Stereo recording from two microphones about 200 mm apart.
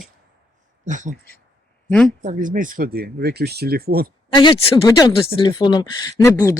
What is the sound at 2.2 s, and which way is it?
Speech, 40° right (ahead or behind).